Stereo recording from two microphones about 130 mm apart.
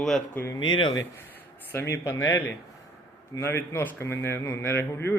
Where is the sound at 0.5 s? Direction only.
35° left (ahead or behind).